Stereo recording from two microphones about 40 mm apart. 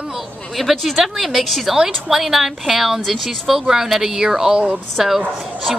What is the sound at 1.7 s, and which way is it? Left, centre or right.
A woman's voice, centre.